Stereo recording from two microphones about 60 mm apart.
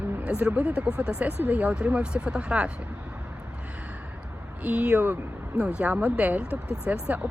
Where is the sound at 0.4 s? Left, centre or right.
Centre.